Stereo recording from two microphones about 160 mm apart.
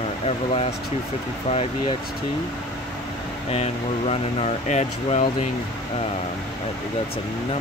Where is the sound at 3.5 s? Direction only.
40° left (ahead or behind).